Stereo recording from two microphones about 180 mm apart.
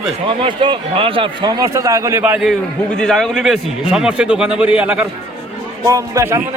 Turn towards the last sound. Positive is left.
turn(degrees=-15)  # may be behind; listen again after turning